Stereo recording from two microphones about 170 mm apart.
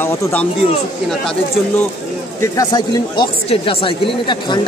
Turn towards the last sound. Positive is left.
turn(degrees=25)  # may be behind; listen again after turning